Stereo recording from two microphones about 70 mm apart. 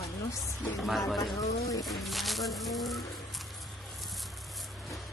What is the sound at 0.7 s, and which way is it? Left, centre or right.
Speech, centre.